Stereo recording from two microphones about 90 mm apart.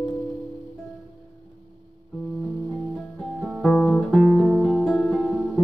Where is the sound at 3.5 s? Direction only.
Centre (ahead or behind).